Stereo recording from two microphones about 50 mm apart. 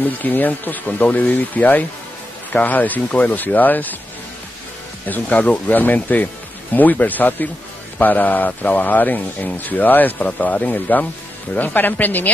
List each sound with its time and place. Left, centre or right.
0.0 s speech: left
5.0 s speech: left